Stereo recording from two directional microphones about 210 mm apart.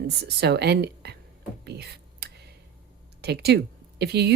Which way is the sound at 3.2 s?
50° right (ahead or behind).